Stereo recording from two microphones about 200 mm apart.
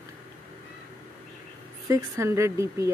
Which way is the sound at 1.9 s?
15° right (ahead or behind).